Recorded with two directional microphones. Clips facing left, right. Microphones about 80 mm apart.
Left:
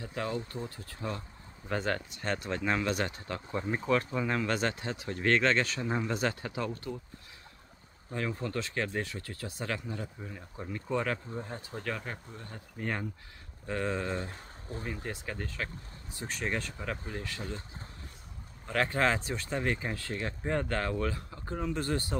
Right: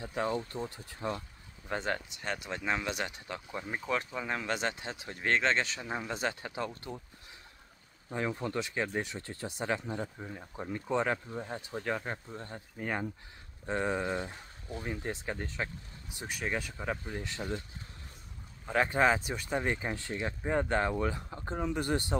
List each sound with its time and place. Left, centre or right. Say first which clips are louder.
0.0 s speech: right 2 dB; right
5.8 s speech: left 4 dB; centre
6.1 s speech: left 2 dB; right
8.1 s speech: right 1 dB; centre
12.7 s speech: even; centre
13.7 s speech: right 1 dB; right
14.7 s speech: even; left
15.0 s speech: right 2 dB; right
16.3 s speech: even; centre
17.1 s speech: right 2 dB; right
18.7 s speech: right 2 dB; centre